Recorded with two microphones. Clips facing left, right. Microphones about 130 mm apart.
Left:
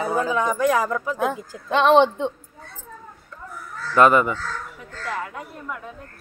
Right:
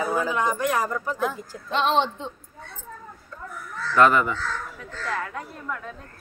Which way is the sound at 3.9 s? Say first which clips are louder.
Left 3 dB; 15° left (ahead or behind).